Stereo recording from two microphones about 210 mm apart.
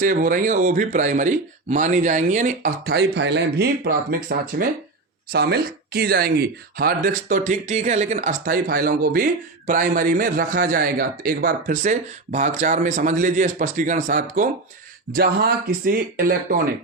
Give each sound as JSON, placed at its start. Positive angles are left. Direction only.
{"t": 0.0, "sound": "speech", "side_deg": -40}